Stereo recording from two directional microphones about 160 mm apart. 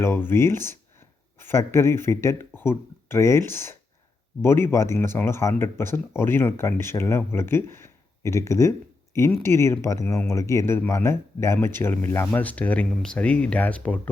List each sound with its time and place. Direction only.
0.0 s speech: 15° left (ahead or behind)